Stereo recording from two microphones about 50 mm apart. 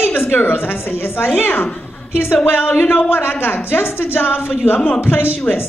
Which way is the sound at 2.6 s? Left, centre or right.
Left.